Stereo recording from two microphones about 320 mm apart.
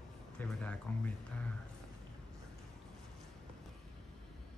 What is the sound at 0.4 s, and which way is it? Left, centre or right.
Music, centre.